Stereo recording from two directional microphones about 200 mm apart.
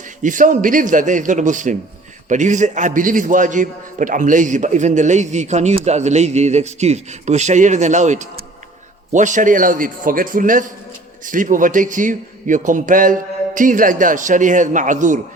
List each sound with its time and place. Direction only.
0.2 s a man's voice: 40° right (ahead or behind)